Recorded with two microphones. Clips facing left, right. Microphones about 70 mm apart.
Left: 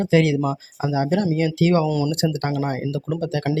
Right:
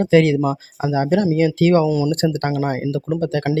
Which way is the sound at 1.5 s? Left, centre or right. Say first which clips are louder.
Right 3 dB; right.